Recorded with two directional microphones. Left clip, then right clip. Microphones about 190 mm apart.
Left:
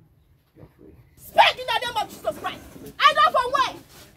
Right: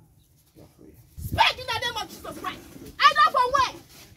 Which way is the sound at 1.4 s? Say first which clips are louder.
Left 5 dB; 60° left (ahead or behind).